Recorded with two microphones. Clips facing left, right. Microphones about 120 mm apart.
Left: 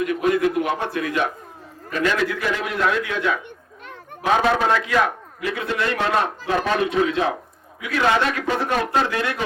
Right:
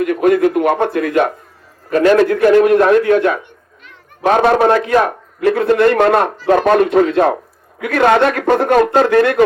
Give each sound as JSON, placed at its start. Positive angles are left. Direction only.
{"t": 0.0, "sound": "a man's voice", "side_deg": -50}